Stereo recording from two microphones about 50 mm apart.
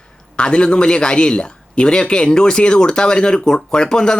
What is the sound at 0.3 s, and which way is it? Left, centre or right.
A man's voice, centre.